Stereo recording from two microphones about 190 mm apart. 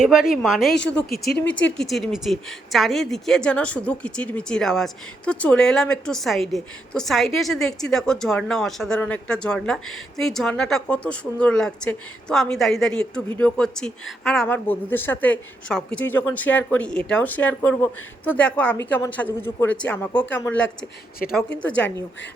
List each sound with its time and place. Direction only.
0.0 s a woman's voice: 5° right (ahead or behind)
1.1 s speech: 55° left (ahead or behind)
1.5 s speech: 75° left (ahead or behind)
1.8 s a woman's voice: centre (ahead or behind)